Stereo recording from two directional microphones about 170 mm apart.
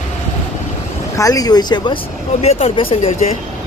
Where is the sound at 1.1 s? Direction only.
20° left (ahead or behind).